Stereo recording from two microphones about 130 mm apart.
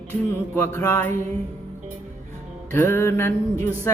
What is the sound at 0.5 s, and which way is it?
Music, 15° left (ahead or behind).